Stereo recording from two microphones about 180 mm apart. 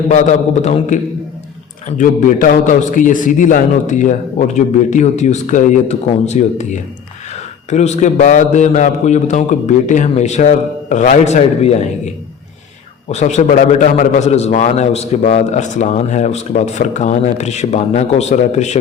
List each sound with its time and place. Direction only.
0.1 s a man's voice: 40° left (ahead or behind)
13.1 s a man's voice: 40° left (ahead or behind)